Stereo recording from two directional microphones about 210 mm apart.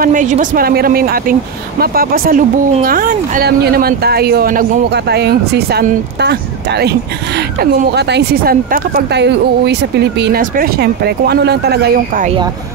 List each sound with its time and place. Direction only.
0.0 s speech: 40° right (ahead or behind)